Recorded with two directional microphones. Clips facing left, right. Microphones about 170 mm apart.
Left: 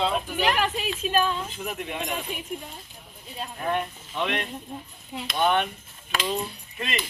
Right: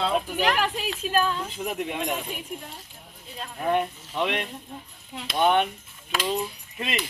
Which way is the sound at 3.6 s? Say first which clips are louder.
Right 4 dB; 15° right (ahead or behind).